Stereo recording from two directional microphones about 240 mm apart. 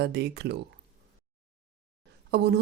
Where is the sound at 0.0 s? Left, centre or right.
Right.